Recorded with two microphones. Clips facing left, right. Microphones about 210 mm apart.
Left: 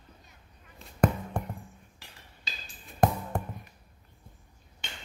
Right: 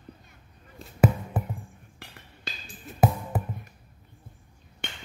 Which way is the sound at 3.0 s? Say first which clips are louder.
Right 1 dB; 5° right (ahead or behind).